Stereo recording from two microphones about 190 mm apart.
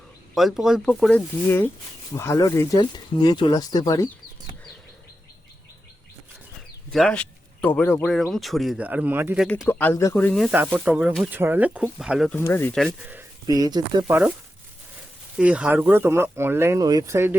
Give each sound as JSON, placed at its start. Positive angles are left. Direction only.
{"t": 0.3, "sound": "speech", "side_deg": 0}
{"t": 6.9, "sound": "speech", "side_deg": 5}
{"t": 9.6, "sound": "speech", "side_deg": 10}
{"t": 10.5, "sound": "speech", "side_deg": -10}
{"t": 12.3, "sound": "speech", "side_deg": 10}
{"t": 12.9, "sound": "speech", "side_deg": -15}
{"t": 15.4, "sound": "speech", "side_deg": -5}